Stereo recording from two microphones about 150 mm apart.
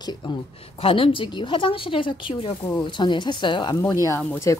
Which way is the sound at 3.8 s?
20° left (ahead or behind).